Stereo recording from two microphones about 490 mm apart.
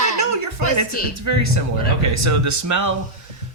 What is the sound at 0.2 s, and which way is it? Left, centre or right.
Music, right.